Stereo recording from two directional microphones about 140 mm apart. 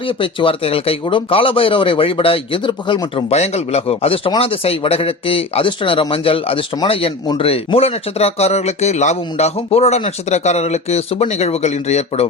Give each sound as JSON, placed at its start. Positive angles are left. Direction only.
{"t": 0.0, "sound": "a man's voice", "side_deg": 40}
{"t": 3.3, "sound": "a man's voice", "side_deg": 50}